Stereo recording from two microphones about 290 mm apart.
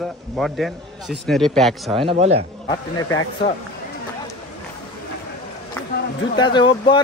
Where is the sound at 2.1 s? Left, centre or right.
Right.